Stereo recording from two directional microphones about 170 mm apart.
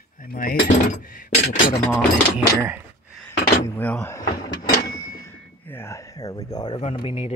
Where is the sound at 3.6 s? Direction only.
10° left (ahead or behind).